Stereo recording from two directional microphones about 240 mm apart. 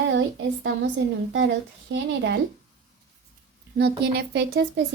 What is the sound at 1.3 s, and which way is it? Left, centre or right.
Speech, right.